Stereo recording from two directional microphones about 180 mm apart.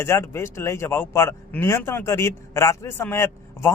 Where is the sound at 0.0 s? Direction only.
15° left (ahead or behind).